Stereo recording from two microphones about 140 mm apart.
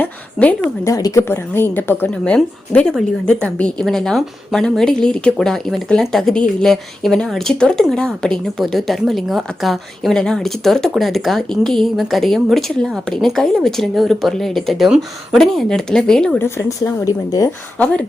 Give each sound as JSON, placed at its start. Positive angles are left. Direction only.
{"t": 0.0, "sound": "a woman's voice", "side_deg": 10}
{"t": 0.9, "sound": "speech", "side_deg": 25}
{"t": 16.4, "sound": "speech", "side_deg": 20}
{"t": 17.7, "sound": "a woman's voice", "side_deg": 5}